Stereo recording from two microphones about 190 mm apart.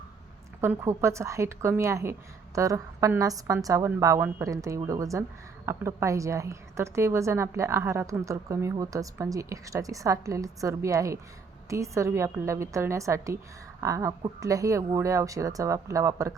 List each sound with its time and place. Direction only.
0.6 s a woman's voice: 15° right (ahead or behind)